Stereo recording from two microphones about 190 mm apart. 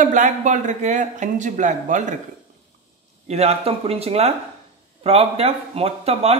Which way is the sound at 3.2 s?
35° right (ahead or behind).